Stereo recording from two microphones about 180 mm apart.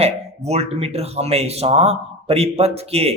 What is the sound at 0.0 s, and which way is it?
A man's voice, 35° right (ahead or behind).